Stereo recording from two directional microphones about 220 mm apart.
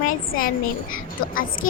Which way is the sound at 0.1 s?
40° left (ahead or behind).